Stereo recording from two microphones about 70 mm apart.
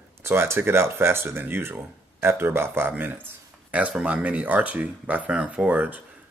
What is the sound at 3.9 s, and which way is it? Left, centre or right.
Speech, centre.